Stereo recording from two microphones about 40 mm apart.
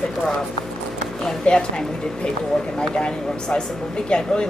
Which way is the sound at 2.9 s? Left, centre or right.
Left.